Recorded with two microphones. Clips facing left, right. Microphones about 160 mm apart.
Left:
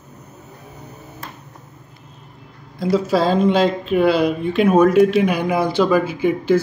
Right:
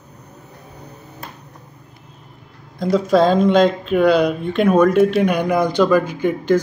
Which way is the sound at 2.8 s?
5° left (ahead or behind).